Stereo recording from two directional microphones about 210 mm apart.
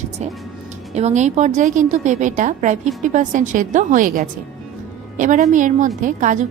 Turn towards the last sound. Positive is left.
turn(degrees=-35)  # may be behind; listen again after turning